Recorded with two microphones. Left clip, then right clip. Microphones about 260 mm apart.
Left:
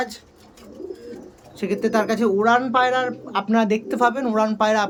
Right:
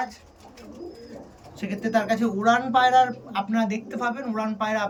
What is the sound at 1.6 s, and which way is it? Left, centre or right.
Speech, centre.